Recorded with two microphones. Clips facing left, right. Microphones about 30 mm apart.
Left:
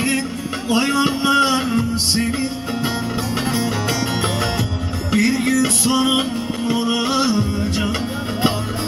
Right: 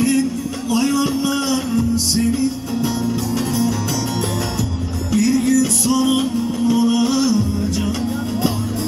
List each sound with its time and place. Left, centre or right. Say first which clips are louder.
0.0 s music: right 3 dB; left
5.1 s music: right 1 dB; left